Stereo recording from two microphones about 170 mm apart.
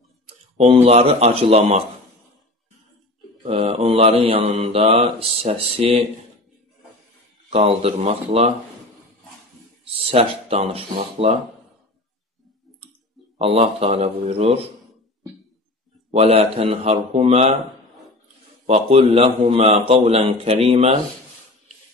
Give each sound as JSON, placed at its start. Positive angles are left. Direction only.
{"t": 0.6, "sound": "speech", "side_deg": -40}
{"t": 3.4, "sound": "speech", "side_deg": -40}
{"t": 7.4, "sound": "speech", "side_deg": -35}
{"t": 9.9, "sound": "speech", "side_deg": -35}
{"t": 13.4, "sound": "speech", "side_deg": -35}
{"t": 16.1, "sound": "speech", "side_deg": -35}
{"t": 18.9, "sound": "speech", "side_deg": -35}